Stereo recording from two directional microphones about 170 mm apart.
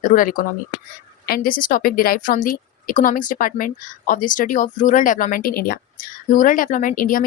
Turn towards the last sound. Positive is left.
turn(degrees=55)  # may be behind; listen again after turning